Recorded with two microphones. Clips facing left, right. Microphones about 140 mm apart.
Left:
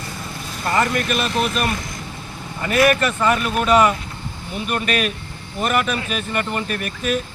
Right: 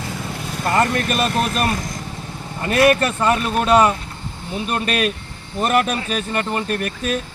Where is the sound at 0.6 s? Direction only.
40° right (ahead or behind).